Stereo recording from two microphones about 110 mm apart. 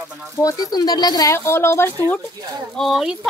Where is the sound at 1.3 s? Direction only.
25° left (ahead or behind).